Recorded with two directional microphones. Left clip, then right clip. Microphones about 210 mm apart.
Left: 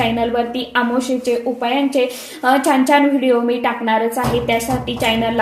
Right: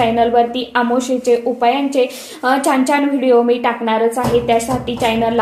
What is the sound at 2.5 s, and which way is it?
A woman's voice, 25° right (ahead or behind).